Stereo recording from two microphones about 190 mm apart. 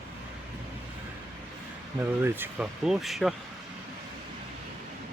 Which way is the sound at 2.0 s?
10° right (ahead or behind).